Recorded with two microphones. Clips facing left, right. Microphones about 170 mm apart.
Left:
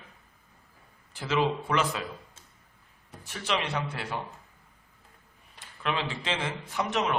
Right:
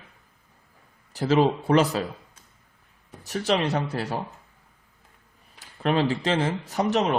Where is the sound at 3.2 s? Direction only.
40° right (ahead or behind).